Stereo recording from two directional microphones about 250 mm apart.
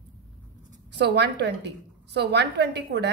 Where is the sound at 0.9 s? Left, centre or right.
Right.